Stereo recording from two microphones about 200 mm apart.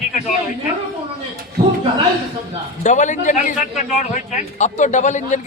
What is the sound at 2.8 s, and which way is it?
A man's voice, 35° left (ahead or behind).